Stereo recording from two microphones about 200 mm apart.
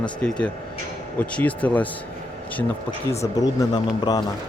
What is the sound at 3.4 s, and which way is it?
Speech, 20° left (ahead or behind).